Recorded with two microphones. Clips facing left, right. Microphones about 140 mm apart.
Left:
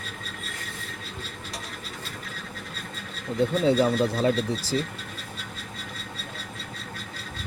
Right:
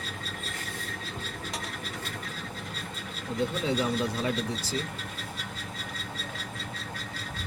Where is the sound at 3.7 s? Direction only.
35° left (ahead or behind).